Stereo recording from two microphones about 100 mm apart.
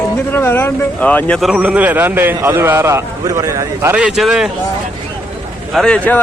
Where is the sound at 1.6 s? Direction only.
15° right (ahead or behind).